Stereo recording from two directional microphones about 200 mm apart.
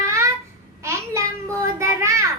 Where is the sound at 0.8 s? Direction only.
15° right (ahead or behind).